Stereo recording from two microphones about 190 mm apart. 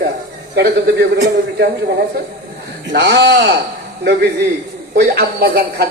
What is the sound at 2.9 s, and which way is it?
Speech, 65° right (ahead or behind).